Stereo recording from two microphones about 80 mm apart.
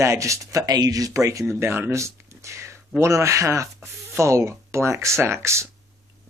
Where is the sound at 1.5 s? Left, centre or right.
Right.